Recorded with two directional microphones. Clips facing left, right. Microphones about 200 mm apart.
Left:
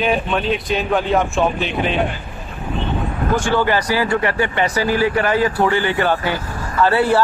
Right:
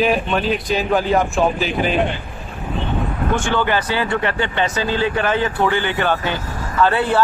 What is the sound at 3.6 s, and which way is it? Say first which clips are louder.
Speech: left 2 dB; 25° right (ahead or behind).